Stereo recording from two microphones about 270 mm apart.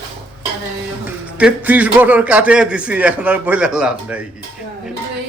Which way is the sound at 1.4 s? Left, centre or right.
Centre.